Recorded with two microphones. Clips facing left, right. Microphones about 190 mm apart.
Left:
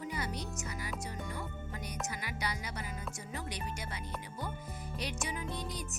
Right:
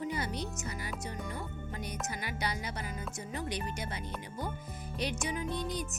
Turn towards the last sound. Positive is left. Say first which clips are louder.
# right 5 dB
turn(degrees=0)  # may be behind; listen again after turning